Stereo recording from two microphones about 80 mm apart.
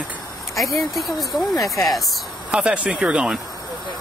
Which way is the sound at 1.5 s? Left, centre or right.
Left.